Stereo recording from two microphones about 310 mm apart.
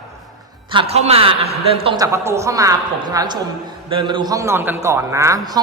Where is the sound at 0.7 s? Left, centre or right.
Centre.